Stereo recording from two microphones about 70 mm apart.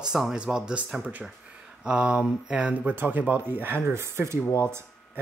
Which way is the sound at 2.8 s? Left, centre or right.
Right.